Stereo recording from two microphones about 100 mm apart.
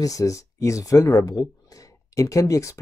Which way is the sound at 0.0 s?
35° left (ahead or behind).